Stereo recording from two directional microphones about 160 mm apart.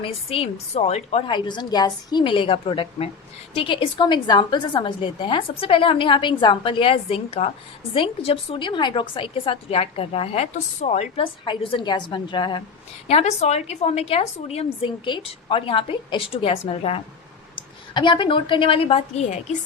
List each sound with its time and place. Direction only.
0.0 s a woman's voice: 40° left (ahead or behind)
1.3 s a woman's voice: 30° left (ahead or behind); by 11.3 s 45° left (ahead or behind)
11.4 s a woman's voice: 35° left (ahead or behind)
13.1 s a woman's voice: 40° left (ahead or behind)